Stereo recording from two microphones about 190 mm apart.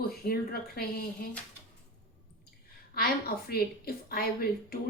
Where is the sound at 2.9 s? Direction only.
55° left (ahead or behind).